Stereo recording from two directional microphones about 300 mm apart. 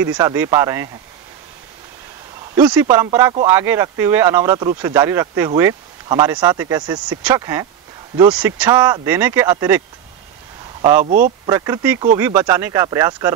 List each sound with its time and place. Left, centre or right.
0.0 s speech: centre
2.5 s speech: centre
11.1 s speech: right
11.4 s speech: centre